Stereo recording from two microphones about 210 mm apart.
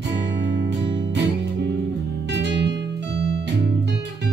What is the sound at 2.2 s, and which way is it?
Music, 55° right (ahead or behind).